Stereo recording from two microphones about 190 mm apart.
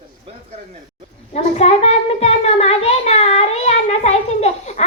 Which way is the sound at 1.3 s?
30° left (ahead or behind).